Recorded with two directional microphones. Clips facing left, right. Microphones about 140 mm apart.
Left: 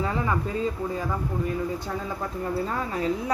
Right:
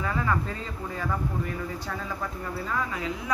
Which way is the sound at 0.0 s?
20° left (ahead or behind).